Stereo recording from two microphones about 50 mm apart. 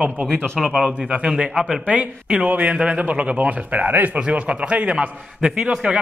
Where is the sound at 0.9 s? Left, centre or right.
Right.